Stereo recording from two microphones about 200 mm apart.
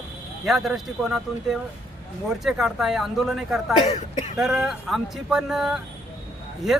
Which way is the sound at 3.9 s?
35° left (ahead or behind).